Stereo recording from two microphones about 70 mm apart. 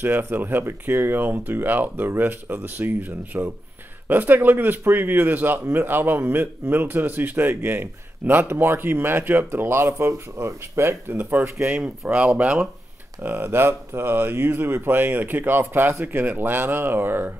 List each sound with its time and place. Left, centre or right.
0.0 s speech: right
11.6 s speech: right
13.2 s speech: right